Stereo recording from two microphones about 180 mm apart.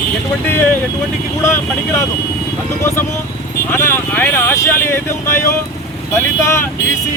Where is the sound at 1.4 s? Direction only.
15° left (ahead or behind).